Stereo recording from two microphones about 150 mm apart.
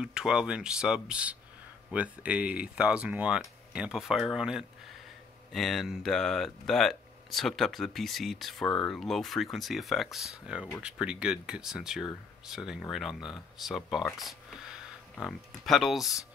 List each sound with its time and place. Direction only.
0.0 s speech: 5° right (ahead or behind)